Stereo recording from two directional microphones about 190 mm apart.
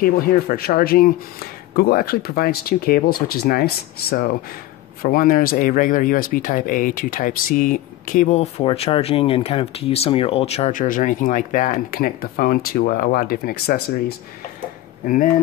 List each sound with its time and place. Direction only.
0.0 s speech: 50° left (ahead or behind)